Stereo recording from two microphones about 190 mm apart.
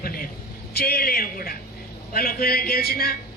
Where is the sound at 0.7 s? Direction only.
55° left (ahead or behind).